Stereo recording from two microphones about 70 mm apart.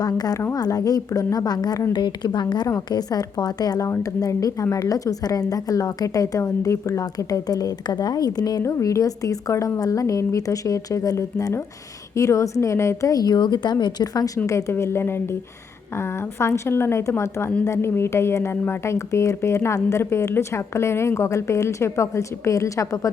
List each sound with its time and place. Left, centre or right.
0.0 s a woman's voice: left
1.9 s a woman's voice: left
2.9 s speech: left
3.8 s a woman's voice: left
8.6 s a woman's voice: left
14.7 s a woman's voice: left